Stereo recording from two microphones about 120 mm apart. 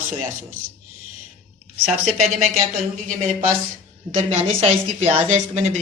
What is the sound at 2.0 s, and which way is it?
Speech, 65° right (ahead or behind).